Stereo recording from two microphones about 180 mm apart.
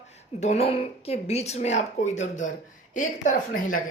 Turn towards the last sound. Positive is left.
turn(degrees=50)  # may be behind; listen again after turning